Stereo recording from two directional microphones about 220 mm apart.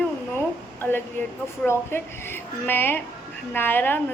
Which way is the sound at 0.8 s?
10° left (ahead or behind).